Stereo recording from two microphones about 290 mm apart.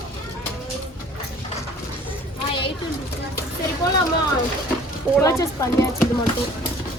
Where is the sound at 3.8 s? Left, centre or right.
Centre.